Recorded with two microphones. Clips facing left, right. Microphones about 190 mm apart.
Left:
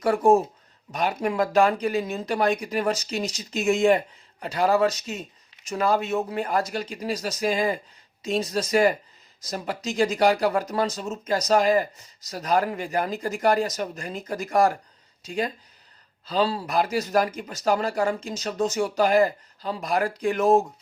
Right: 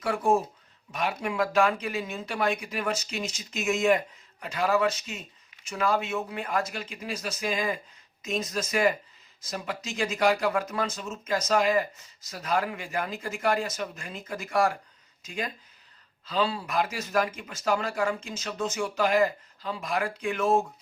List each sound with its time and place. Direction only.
0.0 s speech: 40° left (ahead or behind)